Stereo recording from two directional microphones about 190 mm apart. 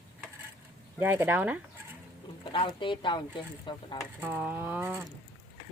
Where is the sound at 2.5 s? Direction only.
25° left (ahead or behind).